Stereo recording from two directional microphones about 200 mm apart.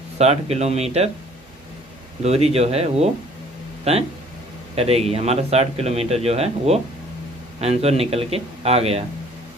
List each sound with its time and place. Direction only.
0.2 s a man's voice: 30° right (ahead or behind)
2.2 s a man's voice: 30° right (ahead or behind)